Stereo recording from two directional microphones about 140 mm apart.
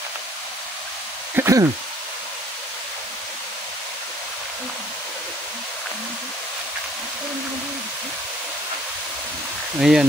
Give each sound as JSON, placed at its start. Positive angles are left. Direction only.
{"t": 1.3, "sound": "speech", "side_deg": -20}
{"t": 9.8, "sound": "speech", "side_deg": -5}